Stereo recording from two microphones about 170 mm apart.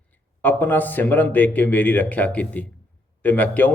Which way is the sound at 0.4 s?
10° left (ahead or behind).